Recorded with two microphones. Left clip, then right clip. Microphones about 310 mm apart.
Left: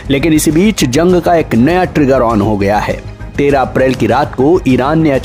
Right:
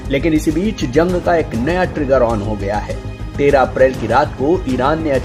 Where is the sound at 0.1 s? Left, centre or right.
Left.